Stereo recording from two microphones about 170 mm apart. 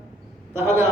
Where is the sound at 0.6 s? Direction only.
15° right (ahead or behind).